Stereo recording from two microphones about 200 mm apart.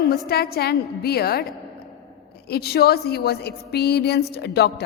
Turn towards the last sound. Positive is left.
turn(degrees=55)  # may be behind; listen again after turning